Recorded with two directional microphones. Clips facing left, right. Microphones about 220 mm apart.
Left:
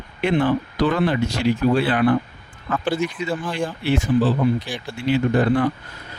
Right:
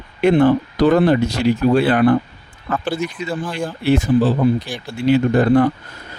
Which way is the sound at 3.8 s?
40° right (ahead or behind).